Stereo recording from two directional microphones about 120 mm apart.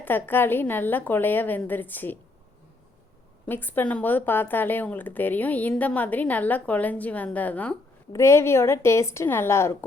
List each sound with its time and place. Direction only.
0.0 s speech: 15° left (ahead or behind)
3.4 s speech: 15° left (ahead or behind)
8.1 s a woman's voice: 25° left (ahead or behind)